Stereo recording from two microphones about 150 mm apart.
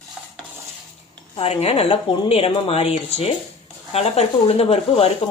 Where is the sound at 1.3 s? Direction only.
40° left (ahead or behind).